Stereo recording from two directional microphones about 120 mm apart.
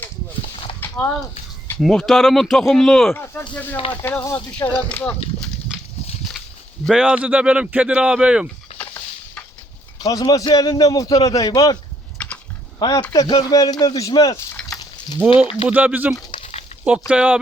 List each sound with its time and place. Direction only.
0.8 s a sound: 15° left (ahead or behind)
1.8 s speech: centre (ahead or behind)
3.1 s speech: 15° left (ahead or behind)
4.9 s speech: 10° left (ahead or behind)
5.7 s a sound: 5° right (ahead or behind)
6.8 s speech: 5° right (ahead or behind)
10.0 s a man's voice: 30° left (ahead or behind)
12.1 s chewing: 10° left (ahead or behind)
12.8 s a man's voice: 35° left (ahead or behind)
15.4 s speech: 55° left (ahead or behind)
15.7 s speech: 15° right (ahead or behind)
16.3 s a sound: 50° left (ahead or behind)
17.1 s speech: 10° right (ahead or behind)